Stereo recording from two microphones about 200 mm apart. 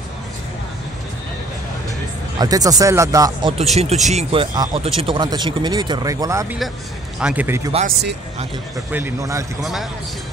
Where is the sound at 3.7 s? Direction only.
35° right (ahead or behind); by 7.7 s 10° right (ahead or behind).